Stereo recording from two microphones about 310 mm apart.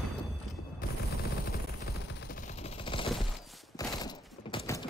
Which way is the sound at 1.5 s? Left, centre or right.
Left.